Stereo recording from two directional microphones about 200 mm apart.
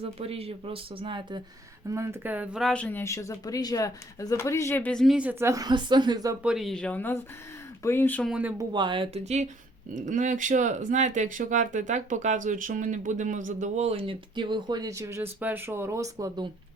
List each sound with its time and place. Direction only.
0.0 s speech: 30° right (ahead or behind)
1.9 s speech: 15° right (ahead or behind)
6.4 s speech: centre (ahead or behind)
8.3 s speech: 5° right (ahead or behind)
8.7 s speech: 25° right (ahead or behind)